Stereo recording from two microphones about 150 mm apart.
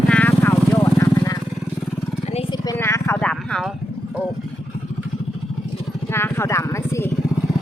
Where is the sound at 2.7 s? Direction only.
20° left (ahead or behind).